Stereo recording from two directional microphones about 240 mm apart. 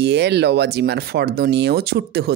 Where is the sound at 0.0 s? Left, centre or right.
Right.